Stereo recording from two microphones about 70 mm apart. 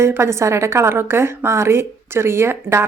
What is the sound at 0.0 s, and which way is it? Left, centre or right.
A woman's voice, right.